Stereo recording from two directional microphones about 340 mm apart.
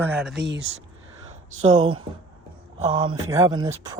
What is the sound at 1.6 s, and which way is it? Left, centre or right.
A man's voice, centre.